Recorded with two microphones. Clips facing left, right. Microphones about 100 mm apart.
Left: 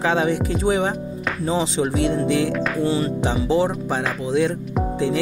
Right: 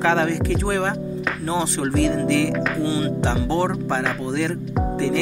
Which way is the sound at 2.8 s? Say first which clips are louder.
Left 3 dB; 25° left (ahead or behind).